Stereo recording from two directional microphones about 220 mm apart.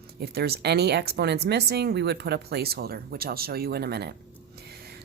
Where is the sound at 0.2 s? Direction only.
45° right (ahead or behind).